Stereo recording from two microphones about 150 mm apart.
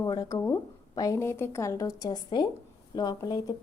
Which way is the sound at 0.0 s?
25° left (ahead or behind).